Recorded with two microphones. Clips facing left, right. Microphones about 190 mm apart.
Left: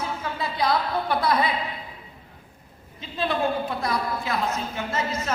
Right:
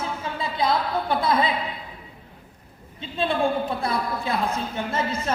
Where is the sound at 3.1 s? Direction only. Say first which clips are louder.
Right 2 dB; 30° right (ahead or behind).